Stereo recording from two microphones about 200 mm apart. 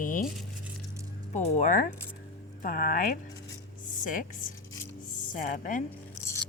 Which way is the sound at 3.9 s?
40° left (ahead or behind).